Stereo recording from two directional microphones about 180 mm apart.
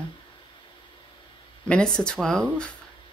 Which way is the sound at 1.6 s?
5° left (ahead or behind).